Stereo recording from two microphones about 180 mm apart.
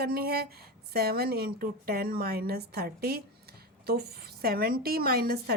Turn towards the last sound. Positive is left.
turn(degrees=-60)  # may be behind; listen again after turning